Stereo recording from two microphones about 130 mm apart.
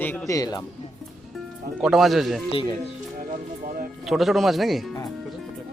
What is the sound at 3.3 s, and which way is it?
Music, 85° right.